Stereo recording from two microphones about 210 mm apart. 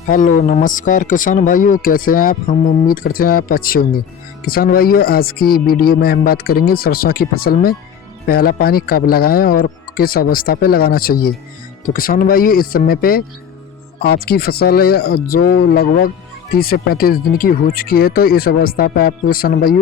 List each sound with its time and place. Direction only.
0.1 s speech: 40° left (ahead or behind)